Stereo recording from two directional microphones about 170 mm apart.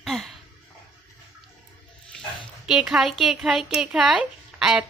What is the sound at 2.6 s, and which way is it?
Speech, 5° right (ahead or behind).